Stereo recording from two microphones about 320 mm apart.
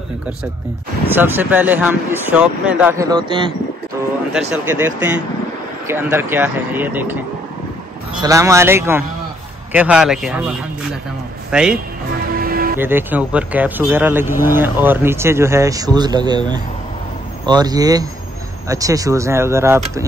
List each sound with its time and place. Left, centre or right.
1.0 s speech: centre
8.2 s speech: centre
11.5 s speech: centre
12.4 s music: right
12.7 s speech: centre